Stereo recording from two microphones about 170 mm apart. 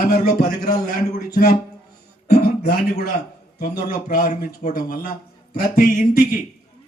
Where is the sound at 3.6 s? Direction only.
60° left (ahead or behind).